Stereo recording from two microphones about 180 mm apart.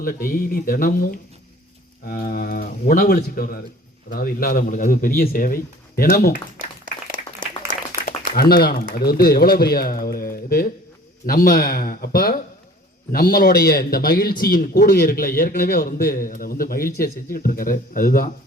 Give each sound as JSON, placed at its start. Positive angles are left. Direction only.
{"t": 0.0, "sound": "speech", "side_deg": 50}
{"t": 8.4, "sound": "speech", "side_deg": 60}